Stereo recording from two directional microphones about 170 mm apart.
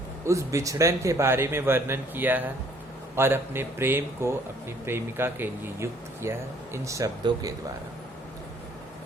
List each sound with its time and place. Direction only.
0.3 s a man's voice: 15° right (ahead or behind)